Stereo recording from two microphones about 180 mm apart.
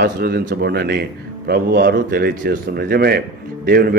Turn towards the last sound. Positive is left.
turn(degrees=-60)  # may be behind; listen again after turning